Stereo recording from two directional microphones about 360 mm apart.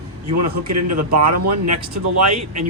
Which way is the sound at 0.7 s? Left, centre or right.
Right.